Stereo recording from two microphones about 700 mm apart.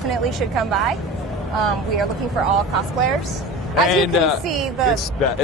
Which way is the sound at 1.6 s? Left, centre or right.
Right.